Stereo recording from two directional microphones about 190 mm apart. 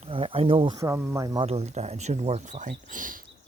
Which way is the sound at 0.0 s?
30° right (ahead or behind).